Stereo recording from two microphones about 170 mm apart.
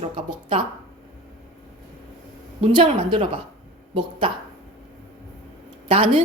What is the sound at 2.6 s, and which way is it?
Speech, 30° right (ahead or behind).